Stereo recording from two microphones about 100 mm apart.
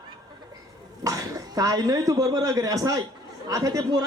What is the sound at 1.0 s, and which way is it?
A man's voice, 35° right (ahead or behind).